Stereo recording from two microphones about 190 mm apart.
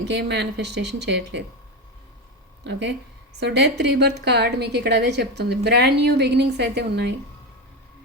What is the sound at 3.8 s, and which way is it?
A woman's voice, 60° right (ahead or behind).